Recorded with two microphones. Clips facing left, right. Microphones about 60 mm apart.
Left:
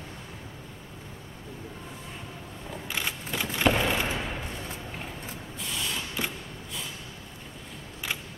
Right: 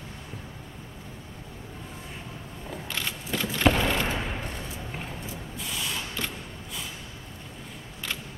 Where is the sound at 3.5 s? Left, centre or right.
Centre.